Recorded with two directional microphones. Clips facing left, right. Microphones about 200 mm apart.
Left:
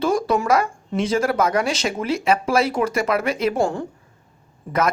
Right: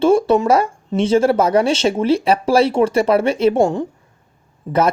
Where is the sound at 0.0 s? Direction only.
30° right (ahead or behind).